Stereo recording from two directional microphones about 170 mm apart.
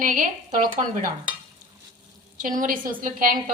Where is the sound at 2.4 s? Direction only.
50° right (ahead or behind).